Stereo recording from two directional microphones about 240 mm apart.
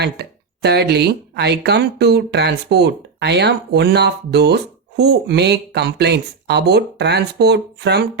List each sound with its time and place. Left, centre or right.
0.0 s speech: right